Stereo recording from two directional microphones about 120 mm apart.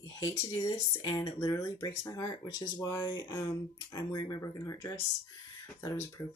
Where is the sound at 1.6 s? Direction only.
25° left (ahead or behind).